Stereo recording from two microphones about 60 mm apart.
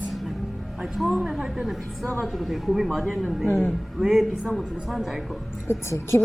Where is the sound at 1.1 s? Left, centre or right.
Centre.